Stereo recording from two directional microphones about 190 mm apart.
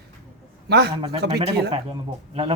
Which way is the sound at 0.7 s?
60° right (ahead or behind).